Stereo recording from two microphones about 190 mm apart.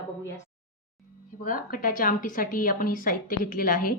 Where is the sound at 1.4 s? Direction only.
45° left (ahead or behind).